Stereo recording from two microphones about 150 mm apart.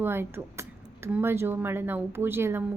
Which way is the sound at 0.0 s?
15° right (ahead or behind).